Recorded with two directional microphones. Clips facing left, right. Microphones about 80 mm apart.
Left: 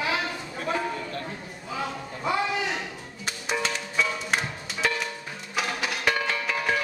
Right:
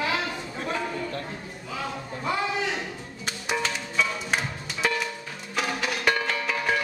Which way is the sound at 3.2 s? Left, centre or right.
Centre.